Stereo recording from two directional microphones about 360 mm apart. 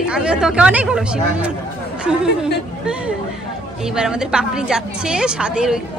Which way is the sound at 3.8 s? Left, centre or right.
Centre.